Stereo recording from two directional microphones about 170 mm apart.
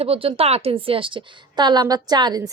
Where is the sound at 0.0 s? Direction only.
35° right (ahead or behind).